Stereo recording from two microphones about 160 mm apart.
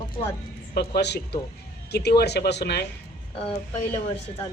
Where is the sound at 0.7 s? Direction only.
90° left.